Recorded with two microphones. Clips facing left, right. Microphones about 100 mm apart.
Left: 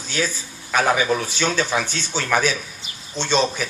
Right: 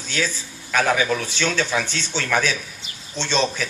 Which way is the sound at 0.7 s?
25° left (ahead or behind).